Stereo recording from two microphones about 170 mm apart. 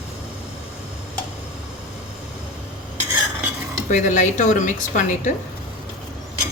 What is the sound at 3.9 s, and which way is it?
Speech, 45° left (ahead or behind).